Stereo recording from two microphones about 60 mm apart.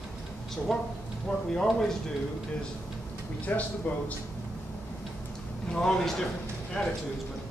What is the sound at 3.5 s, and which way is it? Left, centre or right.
Speech, left.